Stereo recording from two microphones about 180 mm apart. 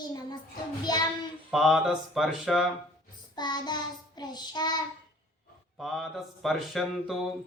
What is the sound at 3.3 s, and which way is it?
Child singing, 25° left (ahead or behind).